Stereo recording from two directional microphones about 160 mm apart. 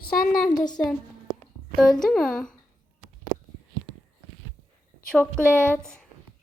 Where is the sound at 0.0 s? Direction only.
65° left (ahead or behind).